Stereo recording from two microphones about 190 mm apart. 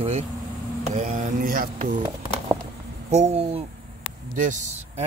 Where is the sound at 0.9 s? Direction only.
40° right (ahead or behind).